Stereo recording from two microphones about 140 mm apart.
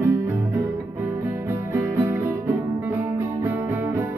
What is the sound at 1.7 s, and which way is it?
Music, 15° right (ahead or behind).